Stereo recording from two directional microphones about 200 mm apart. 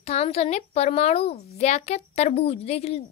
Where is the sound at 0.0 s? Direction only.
30° left (ahead or behind).